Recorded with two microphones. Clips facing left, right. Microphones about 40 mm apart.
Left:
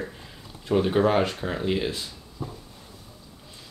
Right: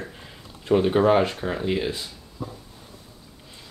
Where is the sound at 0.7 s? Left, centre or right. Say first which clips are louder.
Right 3 dB; centre.